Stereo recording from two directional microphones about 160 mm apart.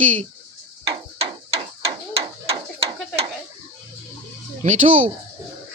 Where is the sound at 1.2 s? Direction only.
40° right (ahead or behind).